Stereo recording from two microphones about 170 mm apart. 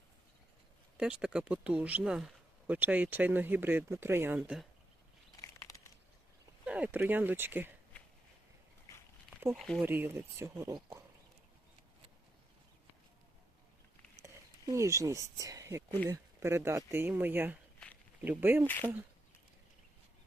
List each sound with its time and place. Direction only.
0.9 s speech: 5° right (ahead or behind)
5.4 s crumpling: 20° left (ahead or behind)
6.7 s speech: 10° right (ahead or behind)
9.6 s speech: centre (ahead or behind)
9.8 s speech: 10° right (ahead or behind)
14.7 s speech: 20° right (ahead or behind)
18.6 s speech: 10° left (ahead or behind)